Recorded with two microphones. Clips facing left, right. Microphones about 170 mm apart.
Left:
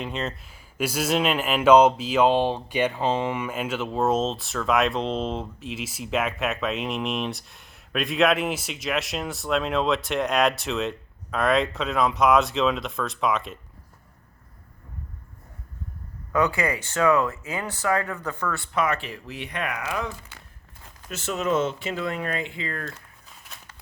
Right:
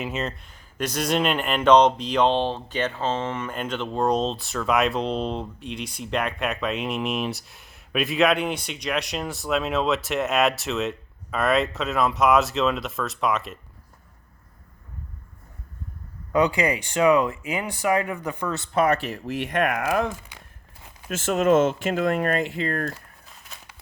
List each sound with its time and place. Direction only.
0.0 s speech: 5° right (ahead or behind)
16.3 s speech: 15° right (ahead or behind)
18.7 s speech: 35° right (ahead or behind)